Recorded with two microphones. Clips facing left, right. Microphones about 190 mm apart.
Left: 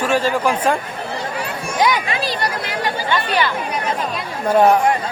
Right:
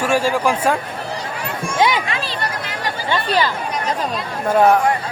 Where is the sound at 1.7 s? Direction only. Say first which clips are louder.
Even; 25° right (ahead or behind).